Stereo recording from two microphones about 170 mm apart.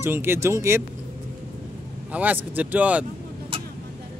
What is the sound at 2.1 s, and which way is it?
Speech, 10° right (ahead or behind).